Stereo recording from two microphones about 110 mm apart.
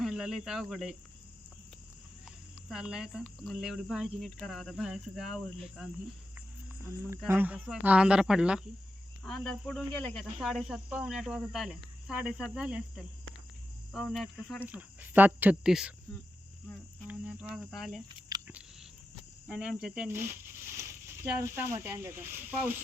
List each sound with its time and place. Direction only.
0.0 s speech: 5° right (ahead or behind)
2.6 s cricket: 5° right (ahead or behind)
7.3 s speech: 15° right (ahead or behind)
9.2 s speech: 5° left (ahead or behind)
10.4 s cricket: 5° right (ahead or behind)
13.9 s cricket: centre (ahead or behind)
14.7 s speech: 15° right (ahead or behind)
17.1 s cricket: 5° right (ahead or behind)
18.3 s biting: 35° right (ahead or behind)
19.5 s speech: 5° right (ahead or behind)
21.4 s speech: 25° right (ahead or behind)